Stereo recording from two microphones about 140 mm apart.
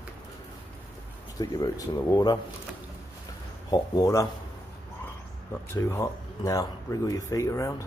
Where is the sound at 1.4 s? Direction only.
25° left (ahead or behind).